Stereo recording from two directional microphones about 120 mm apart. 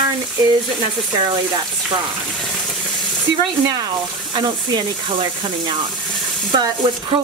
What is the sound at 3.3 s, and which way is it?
A woman's voice, 35° right (ahead or behind).